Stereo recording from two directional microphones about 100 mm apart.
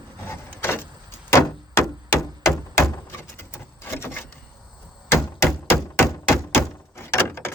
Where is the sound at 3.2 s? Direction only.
25° left (ahead or behind).